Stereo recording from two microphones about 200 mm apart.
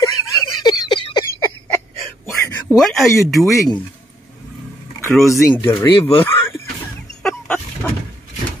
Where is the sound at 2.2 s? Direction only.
15° left (ahead or behind).